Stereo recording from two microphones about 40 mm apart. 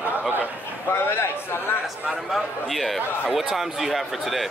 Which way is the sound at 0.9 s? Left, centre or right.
Left.